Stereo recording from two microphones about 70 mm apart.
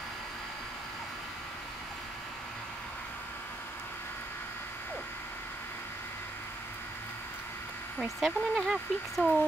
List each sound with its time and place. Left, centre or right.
8.0 s speech: centre